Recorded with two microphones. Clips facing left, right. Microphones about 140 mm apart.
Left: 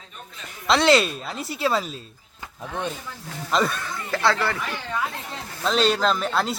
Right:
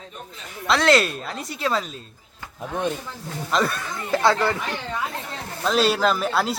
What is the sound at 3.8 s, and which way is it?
Speech, 15° right (ahead or behind).